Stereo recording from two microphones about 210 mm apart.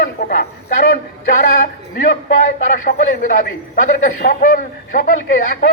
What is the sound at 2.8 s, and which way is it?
A man's voice, 40° left (ahead or behind).